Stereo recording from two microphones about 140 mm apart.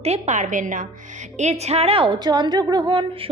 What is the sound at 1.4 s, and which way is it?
A woman's voice, 50° right (ahead or behind).